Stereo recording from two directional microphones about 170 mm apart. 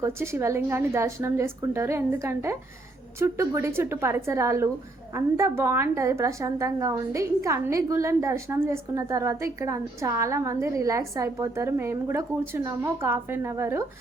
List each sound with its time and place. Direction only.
0.0 s a woman's voice: 15° right (ahead or behind)